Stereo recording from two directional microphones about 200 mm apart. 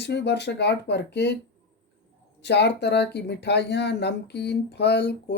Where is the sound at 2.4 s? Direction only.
55° left (ahead or behind).